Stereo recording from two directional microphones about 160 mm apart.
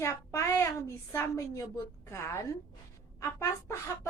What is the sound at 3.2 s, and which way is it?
Speech, 15° left (ahead or behind).